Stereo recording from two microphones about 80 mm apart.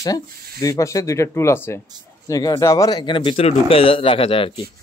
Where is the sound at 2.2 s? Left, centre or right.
Left.